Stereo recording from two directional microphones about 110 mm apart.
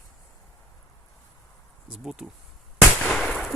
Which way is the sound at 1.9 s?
5° right (ahead or behind).